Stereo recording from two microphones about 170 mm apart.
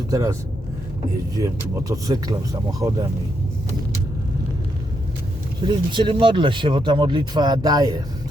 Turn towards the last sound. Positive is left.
turn(degrees=-20)  # may be behind; listen again after turning